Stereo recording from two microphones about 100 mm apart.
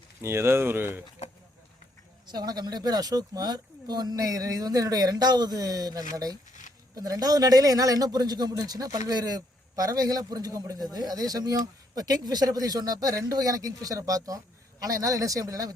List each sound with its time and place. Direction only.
0.2 s speech: 25° right (ahead or behind)
2.2 s speech: 45° right (ahead or behind)